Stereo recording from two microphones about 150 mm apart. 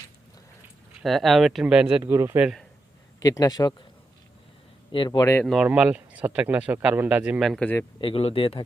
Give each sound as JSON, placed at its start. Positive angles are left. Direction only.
{"t": 1.0, "sound": "speech", "side_deg": 0}
{"t": 3.2, "sound": "speech", "side_deg": 25}
{"t": 4.9, "sound": "speech", "side_deg": 30}
{"t": 5.6, "sound": "speech", "side_deg": -10}
{"t": 8.0, "sound": "speech", "side_deg": 40}